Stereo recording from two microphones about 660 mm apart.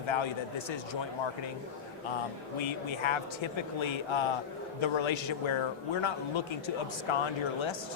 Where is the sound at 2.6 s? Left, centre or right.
Left.